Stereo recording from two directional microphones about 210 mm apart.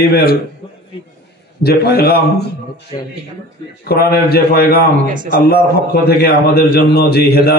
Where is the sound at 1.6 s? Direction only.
50° left (ahead or behind).